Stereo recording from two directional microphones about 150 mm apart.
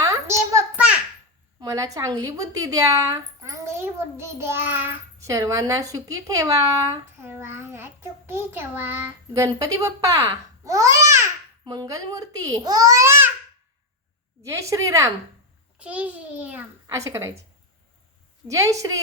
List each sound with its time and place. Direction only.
0.0 s a sound: 20° right (ahead or behind)
1.6 s a woman's voice: 20° right (ahead or behind)
14.4 s a woman's voice: 20° right (ahead or behind)
15.8 s a child's voice: 10° right (ahead or behind)
16.8 s a woman's voice: 20° right (ahead or behind)
18.4 s a woman's voice: 20° right (ahead or behind)